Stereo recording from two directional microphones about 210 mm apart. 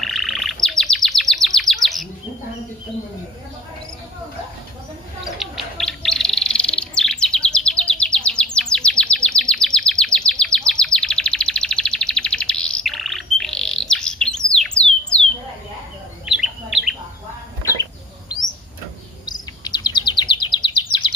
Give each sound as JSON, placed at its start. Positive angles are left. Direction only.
{"t": 0.0, "sound": "bird", "side_deg": 0}
{"t": 5.4, "sound": "bird", "side_deg": 0}
{"t": 16.3, "sound": "bird", "side_deg": 0}
{"t": 19.2, "sound": "chirp", "side_deg": 20}